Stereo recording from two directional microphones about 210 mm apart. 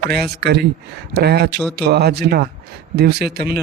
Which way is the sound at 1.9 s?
50° right (ahead or behind).